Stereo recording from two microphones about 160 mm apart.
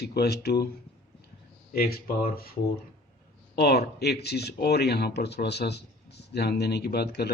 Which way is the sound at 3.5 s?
85° left.